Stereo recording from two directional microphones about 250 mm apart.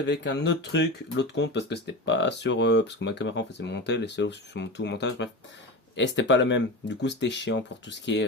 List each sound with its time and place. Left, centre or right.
0.0 s speech: left